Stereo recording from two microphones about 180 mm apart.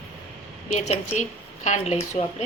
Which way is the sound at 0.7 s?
40° left (ahead or behind).